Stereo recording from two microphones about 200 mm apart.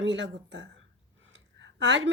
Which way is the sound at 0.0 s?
65° right (ahead or behind).